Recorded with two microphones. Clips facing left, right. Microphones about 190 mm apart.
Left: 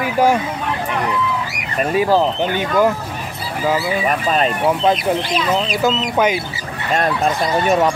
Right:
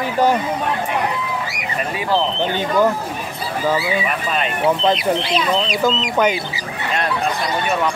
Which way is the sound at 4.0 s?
40° left (ahead or behind).